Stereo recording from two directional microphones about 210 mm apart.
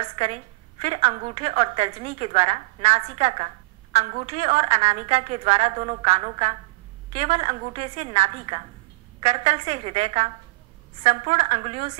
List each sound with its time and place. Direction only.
0.0 s a woman's voice: 30° right (ahead or behind)